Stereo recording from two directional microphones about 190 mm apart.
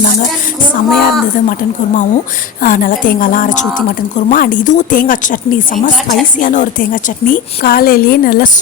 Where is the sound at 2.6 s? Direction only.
45° left (ahead or behind).